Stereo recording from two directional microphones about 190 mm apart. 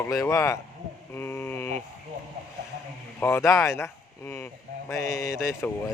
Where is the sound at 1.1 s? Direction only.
10° left (ahead or behind).